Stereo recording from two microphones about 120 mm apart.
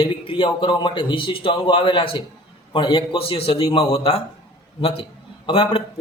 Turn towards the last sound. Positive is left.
turn(degrees=45)  # may be behind; listen again after turning